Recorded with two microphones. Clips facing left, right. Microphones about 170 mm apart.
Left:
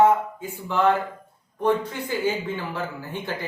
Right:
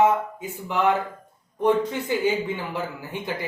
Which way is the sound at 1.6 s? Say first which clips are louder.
Right 2 dB; 20° right (ahead or behind).